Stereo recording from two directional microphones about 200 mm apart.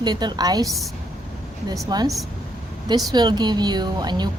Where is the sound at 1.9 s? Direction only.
20° right (ahead or behind).